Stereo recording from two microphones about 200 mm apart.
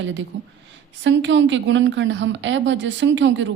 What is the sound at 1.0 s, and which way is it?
A woman's voice, 65° right (ahead or behind).